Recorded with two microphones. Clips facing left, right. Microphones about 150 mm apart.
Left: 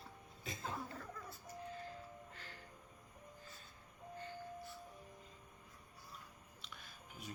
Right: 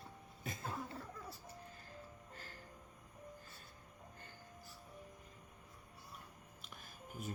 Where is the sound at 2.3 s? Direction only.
40° right (ahead or behind).